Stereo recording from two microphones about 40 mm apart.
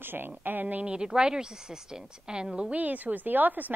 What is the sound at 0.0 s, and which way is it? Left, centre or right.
Speech, right.